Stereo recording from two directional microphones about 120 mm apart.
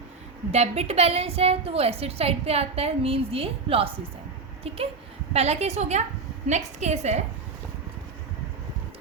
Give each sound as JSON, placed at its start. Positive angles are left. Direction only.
{"t": 0.5, "sound": "a woman's voice", "side_deg": -65}
{"t": 5.3, "sound": "a woman's voice", "side_deg": -60}